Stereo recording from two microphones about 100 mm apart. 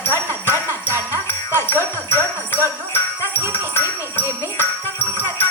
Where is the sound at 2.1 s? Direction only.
25° left (ahead or behind).